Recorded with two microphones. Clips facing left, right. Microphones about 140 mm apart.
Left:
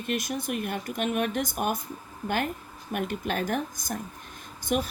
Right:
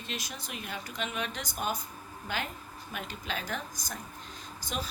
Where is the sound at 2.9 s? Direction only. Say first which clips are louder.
Left 9 dB; 55° left (ahead or behind).